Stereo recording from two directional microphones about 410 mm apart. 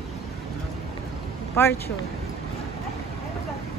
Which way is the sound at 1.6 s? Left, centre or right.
Centre.